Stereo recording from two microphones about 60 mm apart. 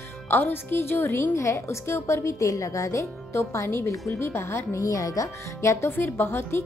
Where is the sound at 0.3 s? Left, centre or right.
Left.